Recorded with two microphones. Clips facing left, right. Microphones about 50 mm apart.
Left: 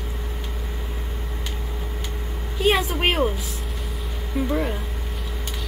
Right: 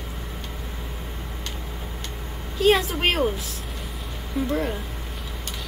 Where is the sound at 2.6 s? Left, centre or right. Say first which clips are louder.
Right 1 dB; centre.